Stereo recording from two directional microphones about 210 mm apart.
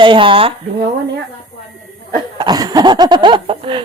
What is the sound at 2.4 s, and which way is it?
Speech, 20° right (ahead or behind).